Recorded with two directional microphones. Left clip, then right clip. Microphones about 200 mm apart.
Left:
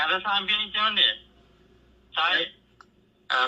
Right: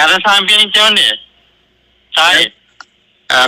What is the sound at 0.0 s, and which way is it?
A man's voice, 50° right (ahead or behind).